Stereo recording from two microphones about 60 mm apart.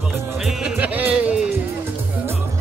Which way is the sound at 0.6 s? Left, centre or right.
Right.